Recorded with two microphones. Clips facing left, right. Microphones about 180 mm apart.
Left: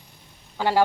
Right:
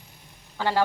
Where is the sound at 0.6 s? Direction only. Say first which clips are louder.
Left 3 dB; 15° left (ahead or behind).